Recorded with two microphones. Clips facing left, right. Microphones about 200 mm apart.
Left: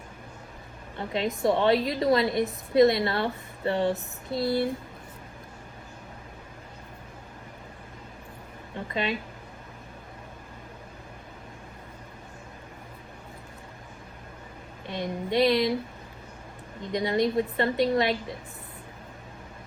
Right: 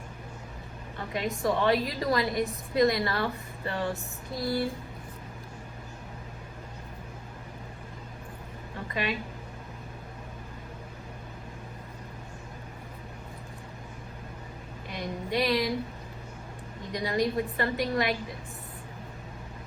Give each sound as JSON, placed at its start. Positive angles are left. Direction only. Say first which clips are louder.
{"t": 0.9, "sound": "a woman's voice", "louder": "left 3 dB", "side_deg": 25}
{"t": 8.9, "sound": "a woman's voice", "louder": "left 2 dB", "side_deg": 25}
{"t": 14.8, "sound": "a sound", "louder": "left 4 dB", "side_deg": 25}
{"t": 16.9, "sound": "a woman's voice", "louder": "left 3 dB", "side_deg": 25}